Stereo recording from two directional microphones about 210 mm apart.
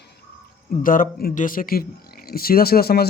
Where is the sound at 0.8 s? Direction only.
40° left (ahead or behind).